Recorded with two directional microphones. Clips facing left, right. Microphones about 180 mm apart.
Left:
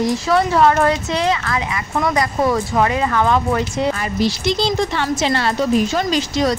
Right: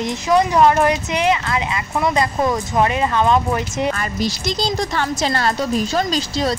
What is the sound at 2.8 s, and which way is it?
Speech, 20° right (ahead or behind).